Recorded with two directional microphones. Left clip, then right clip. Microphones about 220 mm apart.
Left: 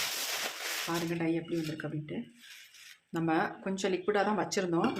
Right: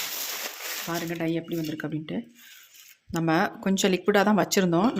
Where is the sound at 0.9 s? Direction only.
35° right (ahead or behind).